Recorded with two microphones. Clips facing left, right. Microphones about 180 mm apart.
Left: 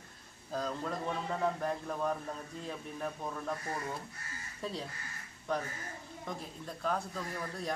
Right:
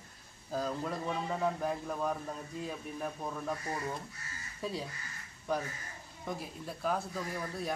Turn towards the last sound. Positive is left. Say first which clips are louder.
# right 2 dB
turn(degrees=-5)  # may be behind; listen again after turning